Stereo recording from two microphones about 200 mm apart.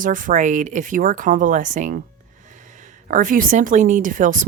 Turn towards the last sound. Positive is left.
turn(degrees=-40)  # may be behind; listen again after turning